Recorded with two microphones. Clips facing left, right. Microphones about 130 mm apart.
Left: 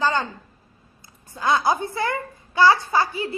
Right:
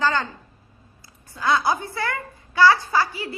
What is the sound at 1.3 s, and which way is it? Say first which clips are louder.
A child's voice: left 1 dB; 20° left (ahead or behind).